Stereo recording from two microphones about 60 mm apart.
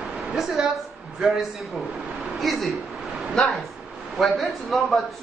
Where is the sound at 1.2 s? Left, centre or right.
Centre.